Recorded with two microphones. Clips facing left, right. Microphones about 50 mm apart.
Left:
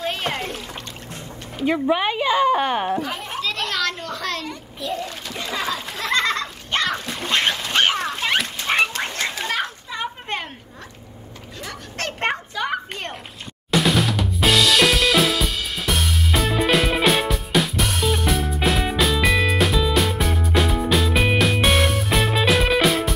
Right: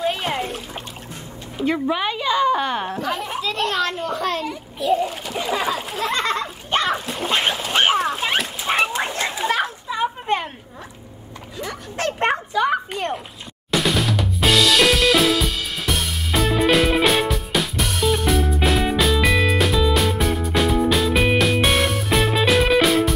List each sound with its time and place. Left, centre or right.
0.0 s splash: centre
1.7 s speech: centre
3.0 s a child's voice: centre
3.9 s a child's voice: centre
7.1 s a sound: centre
9.4 s children playing: centre
11.6 s a sound: centre
13.7 s drum kit: centre